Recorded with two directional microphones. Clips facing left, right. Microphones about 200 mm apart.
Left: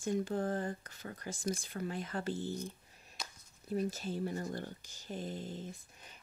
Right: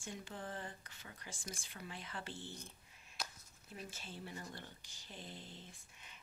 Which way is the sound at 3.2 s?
5° right (ahead or behind).